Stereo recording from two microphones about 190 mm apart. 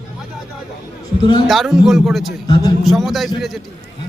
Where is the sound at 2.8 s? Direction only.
Centre (ahead or behind).